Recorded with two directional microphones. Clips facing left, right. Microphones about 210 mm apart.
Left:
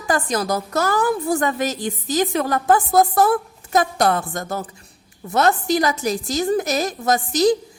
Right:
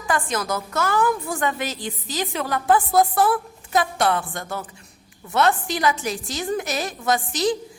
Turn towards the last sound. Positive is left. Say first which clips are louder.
# left 5 dB
turn(degrees=40)  # may be behind; listen again after turning